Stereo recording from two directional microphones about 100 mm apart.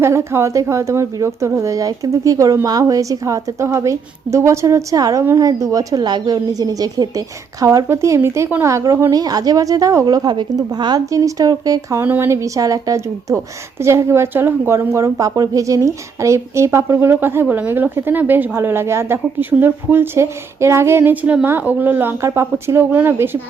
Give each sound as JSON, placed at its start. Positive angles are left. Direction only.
{"t": 0.0, "sound": "a woman's voice", "side_deg": -25}
{"t": 11.1, "sound": "a woman's voice", "side_deg": -35}
{"t": 12.0, "sound": "speech", "side_deg": -15}
{"t": 12.3, "sound": "a woman's voice", "side_deg": -35}